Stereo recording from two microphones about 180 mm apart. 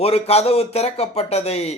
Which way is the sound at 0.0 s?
35° left (ahead or behind).